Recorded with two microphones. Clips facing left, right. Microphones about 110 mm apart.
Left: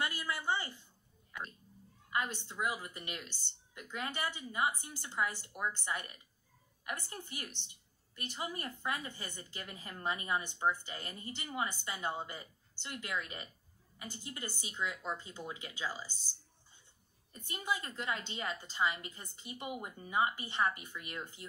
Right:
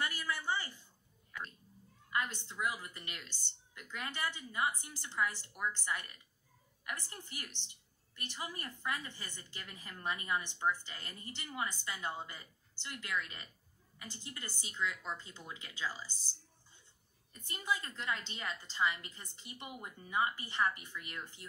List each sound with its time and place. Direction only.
0.0 s speech: 20° left (ahead or behind)
2.0 s a woman's voice: 15° left (ahead or behind)
17.5 s a woman's voice: 15° left (ahead or behind)